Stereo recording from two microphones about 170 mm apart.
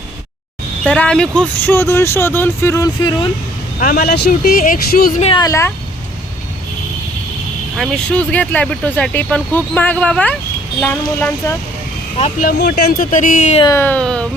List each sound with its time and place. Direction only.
0.9 s speech: 5° left (ahead or behind); by 3.2 s 25° left (ahead or behind)
3.8 s speech: 50° left (ahead or behind)
5.4 s speech: 15° left (ahead or behind)
7.8 s speech: 5° left (ahead or behind)
12.2 s speech: 55° left (ahead or behind)
13.7 s speech: 10° left (ahead or behind)